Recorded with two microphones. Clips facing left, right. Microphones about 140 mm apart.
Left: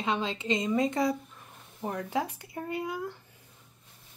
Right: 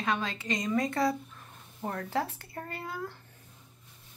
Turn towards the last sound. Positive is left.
turn(degrees=15)  # may be behind; listen again after turning